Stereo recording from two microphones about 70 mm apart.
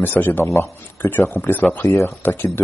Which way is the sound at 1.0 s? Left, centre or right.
Left.